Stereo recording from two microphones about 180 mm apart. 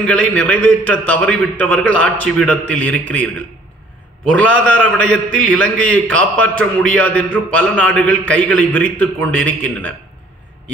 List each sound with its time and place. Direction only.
0.0 s a man's voice: 5° left (ahead or behind)
4.3 s a man's voice: 5° left (ahead or behind)